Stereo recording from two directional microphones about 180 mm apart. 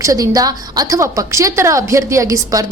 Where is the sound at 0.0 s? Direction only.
20° right (ahead or behind).